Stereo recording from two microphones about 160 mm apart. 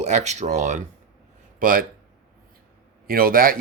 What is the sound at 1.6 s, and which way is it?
Speech, 60° right (ahead or behind).